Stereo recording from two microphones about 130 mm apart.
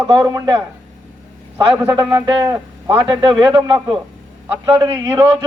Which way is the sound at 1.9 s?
30° right (ahead or behind).